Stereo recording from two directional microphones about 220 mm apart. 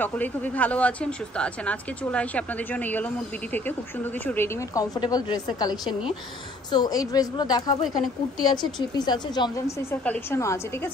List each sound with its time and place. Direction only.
0.0 s speech: 5° left (ahead or behind)
10.0 s speech: 10° left (ahead or behind)